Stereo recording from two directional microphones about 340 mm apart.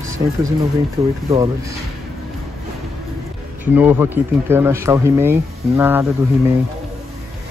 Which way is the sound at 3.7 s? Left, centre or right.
Centre.